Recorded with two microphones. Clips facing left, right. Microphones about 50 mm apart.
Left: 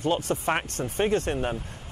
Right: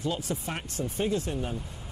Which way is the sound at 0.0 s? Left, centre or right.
Left.